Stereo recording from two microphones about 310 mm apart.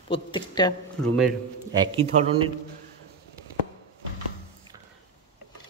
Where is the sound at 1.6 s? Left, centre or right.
Centre.